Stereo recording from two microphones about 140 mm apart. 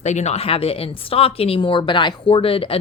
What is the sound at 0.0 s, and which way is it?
Speech, 55° left (ahead or behind).